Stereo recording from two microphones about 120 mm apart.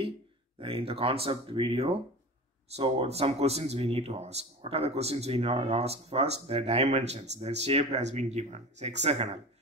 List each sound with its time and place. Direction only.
0.6 s speech: 50° right (ahead or behind); by 9.4 s 65° right (ahead or behind)